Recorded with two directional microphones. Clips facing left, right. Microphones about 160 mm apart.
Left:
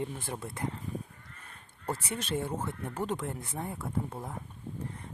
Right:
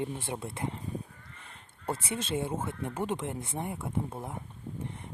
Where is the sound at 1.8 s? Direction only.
25° right (ahead or behind).